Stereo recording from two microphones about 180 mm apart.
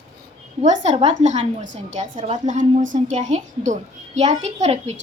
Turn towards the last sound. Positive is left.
turn(degrees=-40)  # may be behind; listen again after turning